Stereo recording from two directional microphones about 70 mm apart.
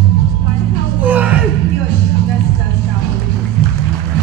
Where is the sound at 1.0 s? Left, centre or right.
Right.